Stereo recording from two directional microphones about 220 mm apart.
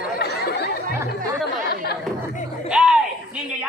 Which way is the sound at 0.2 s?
45° left (ahead or behind).